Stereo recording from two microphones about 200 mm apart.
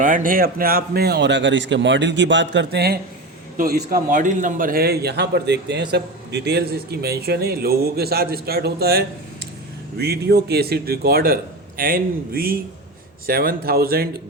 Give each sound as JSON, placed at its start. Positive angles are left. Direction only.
{"t": 0.0, "sound": "a man's voice", "side_deg": -40}